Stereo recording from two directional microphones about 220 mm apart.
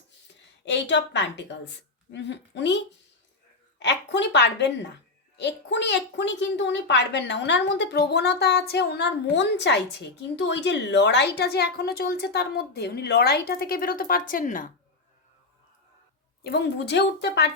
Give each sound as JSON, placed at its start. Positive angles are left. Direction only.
{"t": 0.6, "sound": "a woman's voice", "side_deg": 55}
{"t": 16.4, "sound": "a woman's voice", "side_deg": 50}